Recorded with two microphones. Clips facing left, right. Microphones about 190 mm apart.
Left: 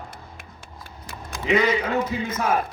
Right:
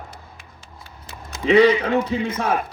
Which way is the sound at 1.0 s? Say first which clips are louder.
Right 7 dB; 30° right (ahead or behind).